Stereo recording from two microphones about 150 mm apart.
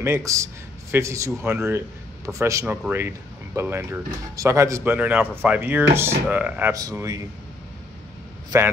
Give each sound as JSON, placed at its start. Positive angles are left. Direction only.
{"t": 0.0, "sound": "a man's voice", "side_deg": -20}
{"t": 6.7, "sound": "a man's voice", "side_deg": -25}